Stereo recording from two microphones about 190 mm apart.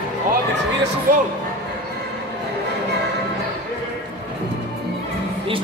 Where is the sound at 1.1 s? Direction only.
50° right (ahead or behind).